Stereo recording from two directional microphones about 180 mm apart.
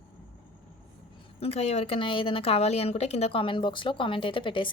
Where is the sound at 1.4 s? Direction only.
35° left (ahead or behind).